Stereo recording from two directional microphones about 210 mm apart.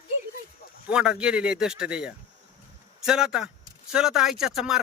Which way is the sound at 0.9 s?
5° right (ahead or behind).